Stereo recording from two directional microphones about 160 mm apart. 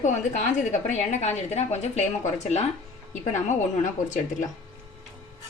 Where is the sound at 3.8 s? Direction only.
50° left (ahead or behind).